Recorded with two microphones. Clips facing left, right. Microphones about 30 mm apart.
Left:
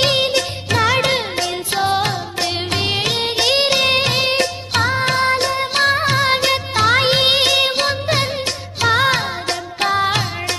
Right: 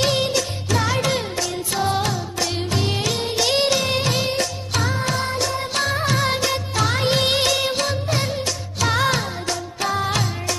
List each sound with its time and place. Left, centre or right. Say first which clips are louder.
0.0 s music: left 4 dB; left
3.4 s music of bollywood: left 3 dB; left
3.8 s music: left 5 dB; left
9.5 s music: left 5 dB; left